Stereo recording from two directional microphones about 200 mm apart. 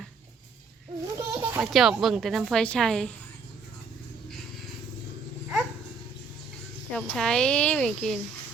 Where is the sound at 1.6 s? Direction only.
Centre (ahead or behind).